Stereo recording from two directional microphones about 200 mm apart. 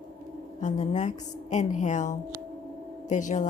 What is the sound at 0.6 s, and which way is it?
Speech, 35° left (ahead or behind).